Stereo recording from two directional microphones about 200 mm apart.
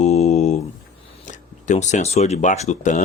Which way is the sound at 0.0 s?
35° left (ahead or behind).